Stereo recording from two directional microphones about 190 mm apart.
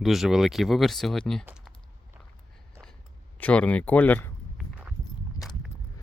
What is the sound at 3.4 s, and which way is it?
Speech, 5° left (ahead or behind).